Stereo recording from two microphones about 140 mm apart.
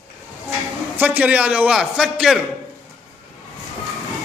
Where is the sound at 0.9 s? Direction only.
10° right (ahead or behind).